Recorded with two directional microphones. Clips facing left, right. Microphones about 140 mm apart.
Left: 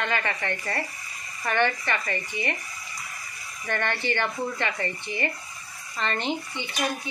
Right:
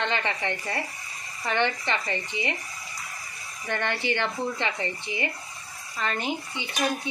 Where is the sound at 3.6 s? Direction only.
15° right (ahead or behind).